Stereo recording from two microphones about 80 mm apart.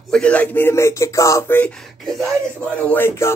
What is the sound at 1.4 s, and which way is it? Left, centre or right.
Speech, left.